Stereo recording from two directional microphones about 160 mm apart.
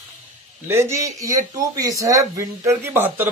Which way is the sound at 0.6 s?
15° right (ahead or behind).